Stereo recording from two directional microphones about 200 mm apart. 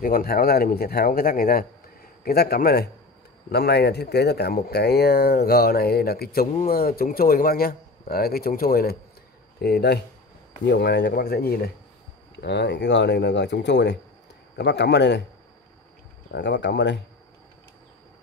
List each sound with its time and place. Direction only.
0.0 s speech: 45° left (ahead or behind)
16.3 s speech: 60° left (ahead or behind)